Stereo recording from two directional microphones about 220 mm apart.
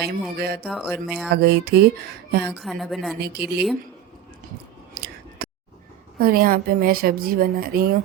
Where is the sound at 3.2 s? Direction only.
45° right (ahead or behind).